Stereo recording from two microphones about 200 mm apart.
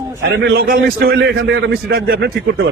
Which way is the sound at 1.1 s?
60° right (ahead or behind).